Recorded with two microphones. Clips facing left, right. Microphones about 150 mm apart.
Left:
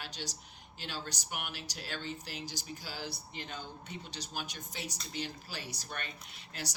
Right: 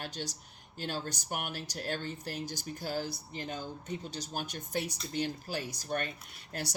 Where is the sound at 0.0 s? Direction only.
50° right (ahead or behind).